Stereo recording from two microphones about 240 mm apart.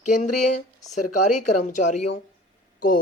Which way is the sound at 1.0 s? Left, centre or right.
Left.